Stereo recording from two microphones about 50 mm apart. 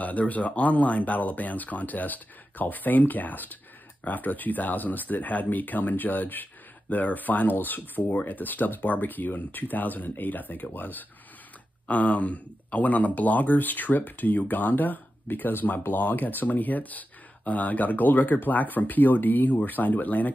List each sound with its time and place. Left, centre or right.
0.0 s speech: left